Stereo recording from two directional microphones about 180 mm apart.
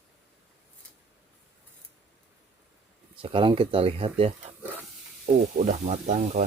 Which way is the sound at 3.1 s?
30° right (ahead or behind).